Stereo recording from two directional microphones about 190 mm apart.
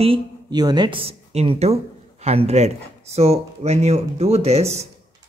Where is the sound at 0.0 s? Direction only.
25° right (ahead or behind).